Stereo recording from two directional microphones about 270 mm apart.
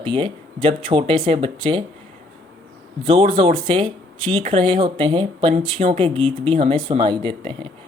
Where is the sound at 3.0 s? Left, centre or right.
Centre.